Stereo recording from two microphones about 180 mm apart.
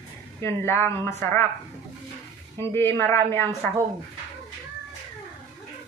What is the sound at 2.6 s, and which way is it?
A woman's voice, 15° left (ahead or behind).